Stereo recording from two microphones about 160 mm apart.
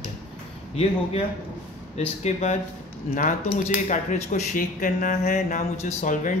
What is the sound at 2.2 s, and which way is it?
Speech, 45° left (ahead or behind).